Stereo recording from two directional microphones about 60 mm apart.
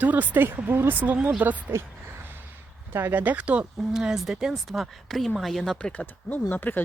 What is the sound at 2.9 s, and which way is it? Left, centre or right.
Speech, right.